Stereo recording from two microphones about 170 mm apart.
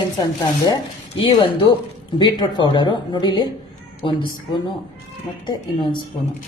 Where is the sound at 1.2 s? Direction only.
30° left (ahead or behind).